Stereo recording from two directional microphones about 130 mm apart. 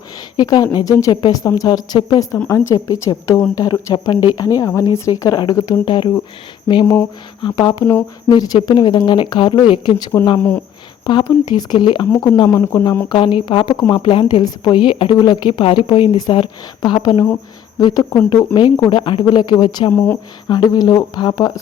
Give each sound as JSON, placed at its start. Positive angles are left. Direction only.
{"t": 0.3, "sound": "a woman's voice", "side_deg": 30}
{"t": 2.5, "sound": "a woman's voice", "side_deg": 25}